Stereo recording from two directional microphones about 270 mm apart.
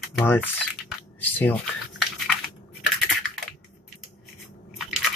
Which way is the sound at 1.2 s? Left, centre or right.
Centre.